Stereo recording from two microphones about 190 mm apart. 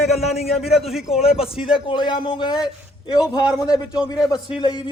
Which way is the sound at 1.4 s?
30° left (ahead or behind).